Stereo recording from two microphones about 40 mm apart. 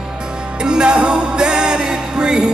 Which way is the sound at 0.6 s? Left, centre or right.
Right.